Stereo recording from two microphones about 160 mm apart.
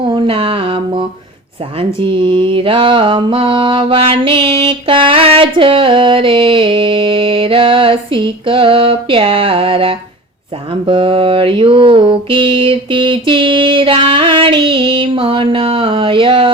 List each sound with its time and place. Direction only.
0.0 s mantra: 30° right (ahead or behind)